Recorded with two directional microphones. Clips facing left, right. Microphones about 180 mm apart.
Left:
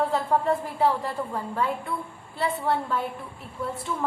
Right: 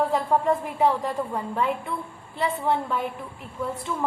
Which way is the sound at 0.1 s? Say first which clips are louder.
Right 1 dB; 15° right (ahead or behind).